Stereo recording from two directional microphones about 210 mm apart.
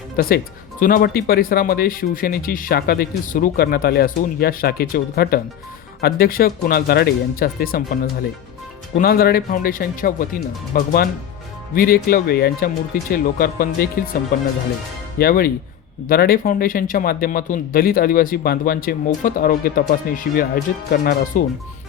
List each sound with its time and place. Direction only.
0.2 s speech: 45° left (ahead or behind)
9.0 s speech: 45° left (ahead or behind)
15.2 s speech: 45° left (ahead or behind)